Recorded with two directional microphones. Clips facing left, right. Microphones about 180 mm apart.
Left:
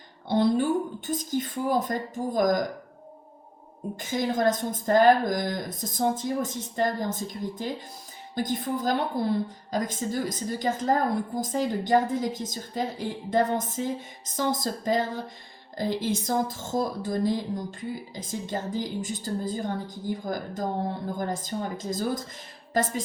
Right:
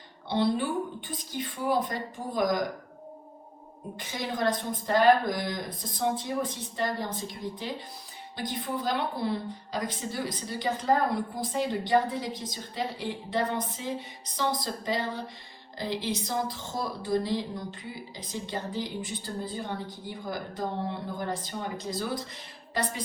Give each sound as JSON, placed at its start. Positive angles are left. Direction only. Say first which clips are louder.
{"t": 0.3, "sound": "speech", "louder": "left 4 dB", "side_deg": 45}
{"t": 3.9, "sound": "speech", "louder": "left 7 dB", "side_deg": 45}